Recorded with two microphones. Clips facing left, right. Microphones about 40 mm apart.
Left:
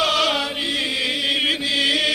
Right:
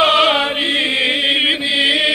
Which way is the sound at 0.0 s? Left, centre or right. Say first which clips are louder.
Right 7 dB; right.